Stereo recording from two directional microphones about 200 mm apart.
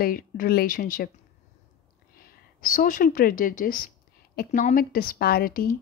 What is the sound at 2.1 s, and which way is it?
A woman's voice, 45° left (ahead or behind).